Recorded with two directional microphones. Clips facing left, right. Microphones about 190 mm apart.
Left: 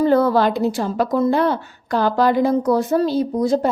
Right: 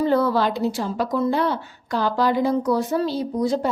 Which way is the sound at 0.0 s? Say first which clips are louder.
Left 4 dB; 50° left (ahead or behind).